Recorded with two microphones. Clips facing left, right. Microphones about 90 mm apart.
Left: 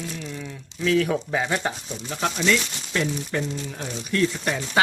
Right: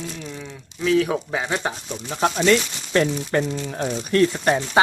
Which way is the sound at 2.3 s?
50° right (ahead or behind).